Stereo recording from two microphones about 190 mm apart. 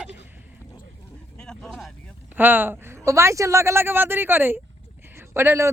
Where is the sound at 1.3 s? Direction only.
5° left (ahead or behind).